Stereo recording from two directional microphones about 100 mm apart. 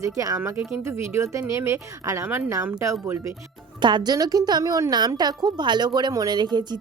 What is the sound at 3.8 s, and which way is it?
A woman's voice, 45° right (ahead or behind).